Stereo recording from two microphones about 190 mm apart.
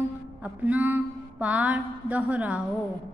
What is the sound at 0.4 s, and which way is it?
Music, 10° right (ahead or behind).